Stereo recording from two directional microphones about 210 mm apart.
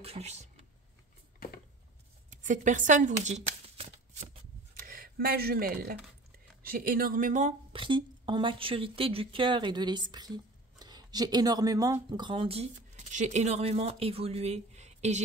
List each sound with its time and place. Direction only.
0.0 s speech: 30° right (ahead or behind)
2.4 s shuffling cards: 35° right (ahead or behind)
6.6 s speech: 45° right (ahead or behind)
7.7 s speech: 25° right (ahead or behind)